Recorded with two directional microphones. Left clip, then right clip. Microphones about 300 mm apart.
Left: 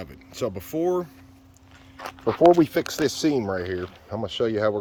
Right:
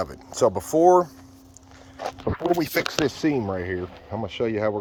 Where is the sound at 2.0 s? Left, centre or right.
Right.